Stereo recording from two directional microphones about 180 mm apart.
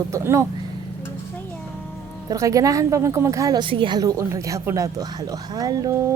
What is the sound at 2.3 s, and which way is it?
A woman's voice, 20° right (ahead or behind).